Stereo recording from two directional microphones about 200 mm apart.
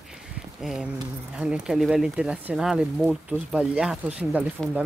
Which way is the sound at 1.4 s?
5° right (ahead or behind).